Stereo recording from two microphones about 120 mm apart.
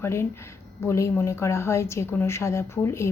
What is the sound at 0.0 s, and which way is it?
Speech, 20° left (ahead or behind).